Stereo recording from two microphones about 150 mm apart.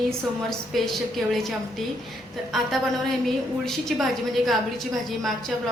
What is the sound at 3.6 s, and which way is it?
Speech, centre (ahead or behind).